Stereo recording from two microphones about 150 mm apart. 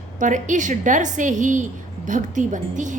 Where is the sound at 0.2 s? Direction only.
55° right (ahead or behind).